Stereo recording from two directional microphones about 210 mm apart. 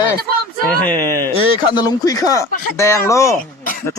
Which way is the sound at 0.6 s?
10° left (ahead or behind).